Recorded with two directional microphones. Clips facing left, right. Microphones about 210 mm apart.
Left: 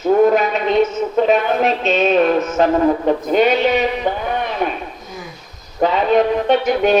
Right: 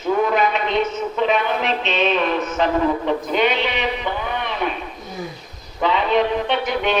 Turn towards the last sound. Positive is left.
turn(degrees=45)  # may be behind; listen again after turning